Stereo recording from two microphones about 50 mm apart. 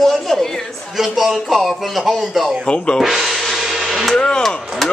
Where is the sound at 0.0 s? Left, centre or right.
Centre.